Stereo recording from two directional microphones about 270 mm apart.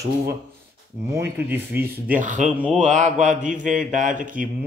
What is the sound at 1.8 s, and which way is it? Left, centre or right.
Speech, right.